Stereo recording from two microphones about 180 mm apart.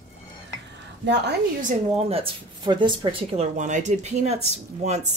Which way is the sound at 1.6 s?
40° right (ahead or behind).